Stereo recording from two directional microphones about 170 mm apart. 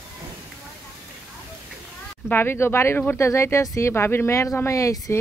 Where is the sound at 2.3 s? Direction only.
15° left (ahead or behind).